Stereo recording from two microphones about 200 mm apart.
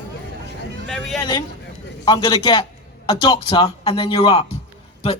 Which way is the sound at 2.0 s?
20° left (ahead or behind).